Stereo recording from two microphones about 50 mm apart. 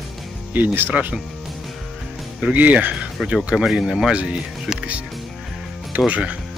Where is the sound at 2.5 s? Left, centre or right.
Right.